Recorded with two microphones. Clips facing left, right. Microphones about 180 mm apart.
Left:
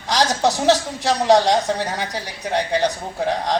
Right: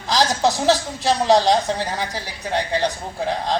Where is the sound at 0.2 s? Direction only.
20° left (ahead or behind).